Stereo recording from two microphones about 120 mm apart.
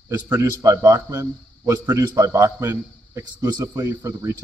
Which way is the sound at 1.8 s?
35° right (ahead or behind).